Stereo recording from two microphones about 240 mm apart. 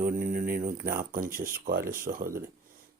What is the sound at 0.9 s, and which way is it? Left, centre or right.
A man's voice, right.